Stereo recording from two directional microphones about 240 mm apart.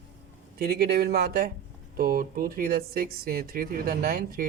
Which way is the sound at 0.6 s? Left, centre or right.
Right.